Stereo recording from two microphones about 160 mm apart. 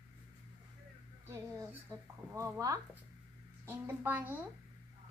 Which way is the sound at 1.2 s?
15° right (ahead or behind).